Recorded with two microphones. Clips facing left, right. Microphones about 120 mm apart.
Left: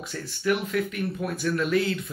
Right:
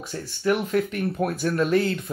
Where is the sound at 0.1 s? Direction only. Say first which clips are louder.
Right 2 dB; 30° right (ahead or behind).